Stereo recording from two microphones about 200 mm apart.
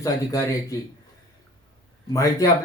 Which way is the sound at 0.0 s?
15° left (ahead or behind).